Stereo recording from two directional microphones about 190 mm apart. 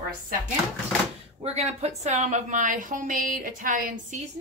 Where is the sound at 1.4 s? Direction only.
35° right (ahead or behind).